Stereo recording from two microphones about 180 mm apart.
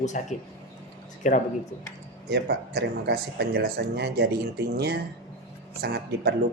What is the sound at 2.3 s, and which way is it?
Speech, 65° right (ahead or behind).